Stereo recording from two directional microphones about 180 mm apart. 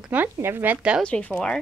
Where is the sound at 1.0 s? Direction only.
5° left (ahead or behind).